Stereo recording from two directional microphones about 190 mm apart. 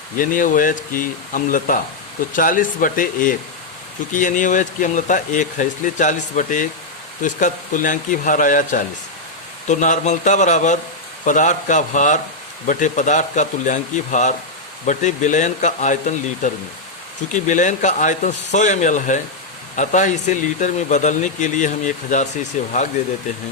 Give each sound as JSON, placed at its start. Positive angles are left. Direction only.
{"t": 0.2, "sound": "speech", "side_deg": 45}